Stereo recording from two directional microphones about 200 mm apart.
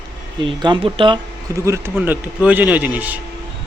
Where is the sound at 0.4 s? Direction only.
25° right (ahead or behind); by 3.2 s 10° right (ahead or behind).